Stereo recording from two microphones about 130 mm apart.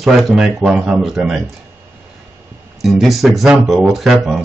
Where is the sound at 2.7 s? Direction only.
Centre (ahead or behind).